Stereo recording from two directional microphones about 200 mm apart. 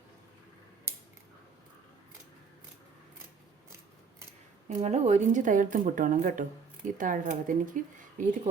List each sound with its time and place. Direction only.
4.8 s speech: 35° right (ahead or behind)